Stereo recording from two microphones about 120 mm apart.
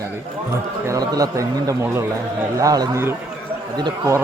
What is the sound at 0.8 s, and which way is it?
A man's voice, 30° right (ahead or behind).